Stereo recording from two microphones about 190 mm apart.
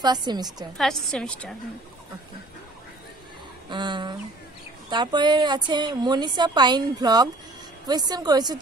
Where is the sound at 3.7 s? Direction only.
25° right (ahead or behind).